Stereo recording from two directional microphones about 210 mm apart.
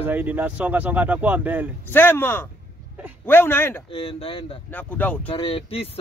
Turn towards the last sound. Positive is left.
turn(degrees=25)  # may be behind; listen again after turning